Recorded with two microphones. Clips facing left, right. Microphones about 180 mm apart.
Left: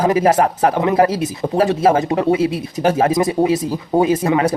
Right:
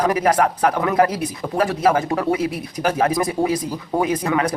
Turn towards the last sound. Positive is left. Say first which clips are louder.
# left 5 dB
turn(degrees=25)  # may be behind; listen again after turning